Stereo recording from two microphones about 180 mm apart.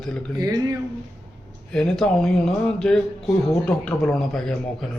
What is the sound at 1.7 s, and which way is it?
Speech, 5° left (ahead or behind).